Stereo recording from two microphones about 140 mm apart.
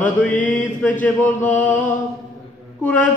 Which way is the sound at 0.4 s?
70° left (ahead or behind).